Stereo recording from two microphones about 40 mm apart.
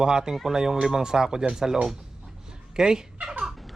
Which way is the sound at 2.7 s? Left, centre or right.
Centre.